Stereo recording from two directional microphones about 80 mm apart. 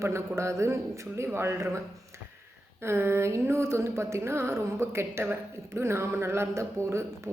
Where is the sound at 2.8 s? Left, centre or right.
Right.